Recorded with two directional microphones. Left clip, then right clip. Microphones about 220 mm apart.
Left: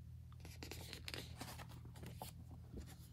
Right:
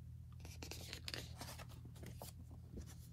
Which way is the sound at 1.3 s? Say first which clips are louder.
Even; 5° right (ahead or behind).